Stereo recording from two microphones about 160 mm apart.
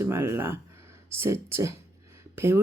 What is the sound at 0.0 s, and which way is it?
Speech, 15° right (ahead or behind).